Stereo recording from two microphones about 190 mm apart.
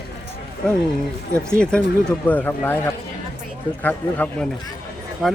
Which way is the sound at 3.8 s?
10° left (ahead or behind).